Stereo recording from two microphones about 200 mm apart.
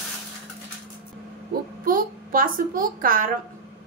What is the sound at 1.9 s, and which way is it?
A woman's voice, 45° right (ahead or behind).